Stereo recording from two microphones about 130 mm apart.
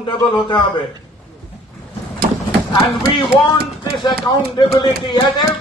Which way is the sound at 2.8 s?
35° left (ahead or behind).